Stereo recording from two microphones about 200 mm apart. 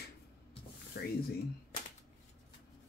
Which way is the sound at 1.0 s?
50° left (ahead or behind).